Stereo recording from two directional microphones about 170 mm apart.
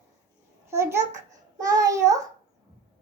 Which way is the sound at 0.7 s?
15° right (ahead or behind).